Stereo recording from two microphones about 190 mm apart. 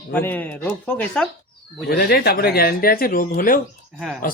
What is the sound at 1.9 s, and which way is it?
Speech, 55° left (ahead or behind).